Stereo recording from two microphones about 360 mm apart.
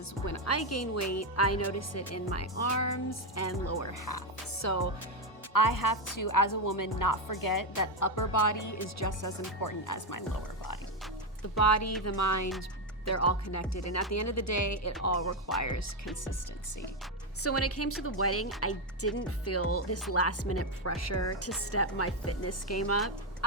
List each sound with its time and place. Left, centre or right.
0.3 s speech: left
5.5 s a woman's voice: left
11.5 s speech: left
17.4 s speech: left